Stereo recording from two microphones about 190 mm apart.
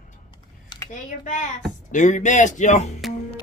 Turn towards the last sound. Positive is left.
turn(degrees=40)  # may be behind; listen again after turning